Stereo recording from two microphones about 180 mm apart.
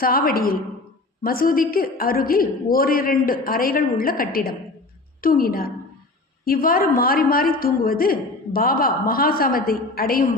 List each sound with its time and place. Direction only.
0.0 s a woman's voice: 55° left (ahead or behind)